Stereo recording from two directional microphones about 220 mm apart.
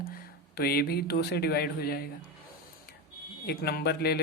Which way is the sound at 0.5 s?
45° left (ahead or behind).